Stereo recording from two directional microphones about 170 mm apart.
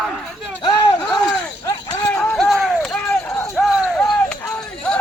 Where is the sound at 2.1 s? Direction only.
5° left (ahead or behind).